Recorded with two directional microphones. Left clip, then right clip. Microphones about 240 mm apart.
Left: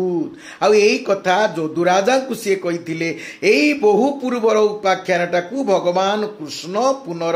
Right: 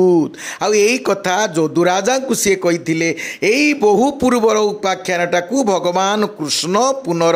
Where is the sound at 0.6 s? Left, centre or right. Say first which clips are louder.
Left 1 dB; right.